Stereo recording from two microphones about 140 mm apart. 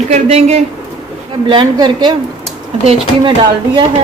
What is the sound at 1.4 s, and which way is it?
Speech, 35° right (ahead or behind).